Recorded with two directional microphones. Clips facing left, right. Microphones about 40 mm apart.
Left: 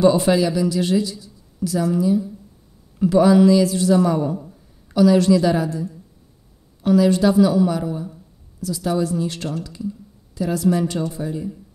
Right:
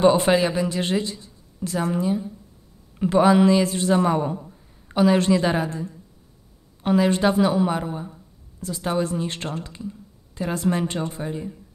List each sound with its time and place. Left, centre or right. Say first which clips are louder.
0.0 s a woman's voice: left 1 dB; right